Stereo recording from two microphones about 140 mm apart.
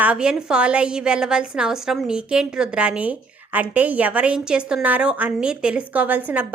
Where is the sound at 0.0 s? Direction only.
5° right (ahead or behind).